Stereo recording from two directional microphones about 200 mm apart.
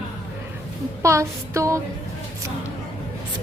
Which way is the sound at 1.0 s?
15° right (ahead or behind).